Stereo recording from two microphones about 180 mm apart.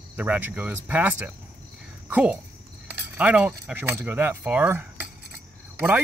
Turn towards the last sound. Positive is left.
turn(degrees=-10)  # may be behind; listen again after turning